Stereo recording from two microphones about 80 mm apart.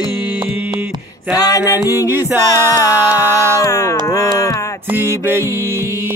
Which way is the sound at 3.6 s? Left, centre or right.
Left.